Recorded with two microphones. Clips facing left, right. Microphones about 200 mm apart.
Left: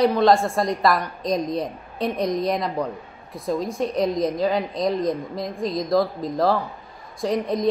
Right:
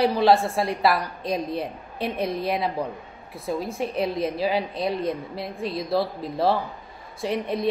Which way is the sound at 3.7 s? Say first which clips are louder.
Left 4 dB; 5° right (ahead or behind).